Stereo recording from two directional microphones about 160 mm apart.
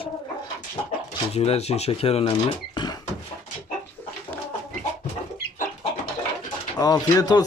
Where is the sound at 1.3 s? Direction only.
40° left (ahead or behind).